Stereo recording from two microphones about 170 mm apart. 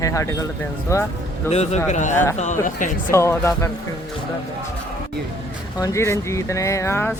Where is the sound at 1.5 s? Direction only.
40° left (ahead or behind).